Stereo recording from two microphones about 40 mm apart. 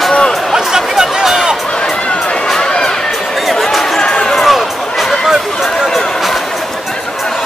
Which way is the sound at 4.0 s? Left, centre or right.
Left.